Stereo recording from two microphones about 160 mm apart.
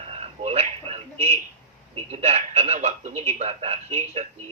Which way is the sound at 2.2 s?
40° right (ahead or behind).